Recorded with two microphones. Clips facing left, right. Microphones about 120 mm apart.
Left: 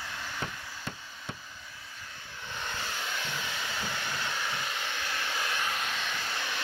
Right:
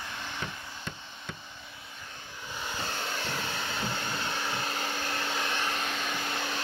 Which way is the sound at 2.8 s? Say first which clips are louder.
Right 4 dB; 35° right (ahead or behind).